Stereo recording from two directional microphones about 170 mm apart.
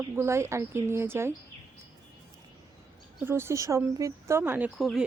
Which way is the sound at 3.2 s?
15° right (ahead or behind).